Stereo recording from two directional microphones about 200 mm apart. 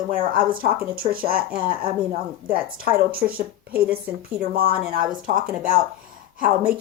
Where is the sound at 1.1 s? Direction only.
45° right (ahead or behind).